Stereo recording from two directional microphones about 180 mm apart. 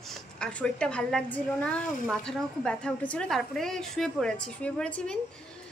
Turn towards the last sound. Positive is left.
turn(degrees=5)  # may be behind; listen again after turning